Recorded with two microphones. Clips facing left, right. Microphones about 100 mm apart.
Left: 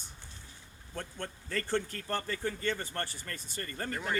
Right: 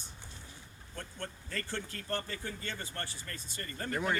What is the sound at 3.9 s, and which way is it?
Speech, 25° right (ahead or behind).